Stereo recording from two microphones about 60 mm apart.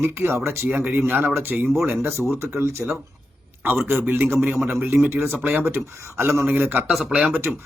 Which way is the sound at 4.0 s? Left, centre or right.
Right.